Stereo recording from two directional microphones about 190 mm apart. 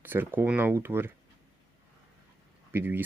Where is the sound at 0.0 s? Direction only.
10° right (ahead or behind).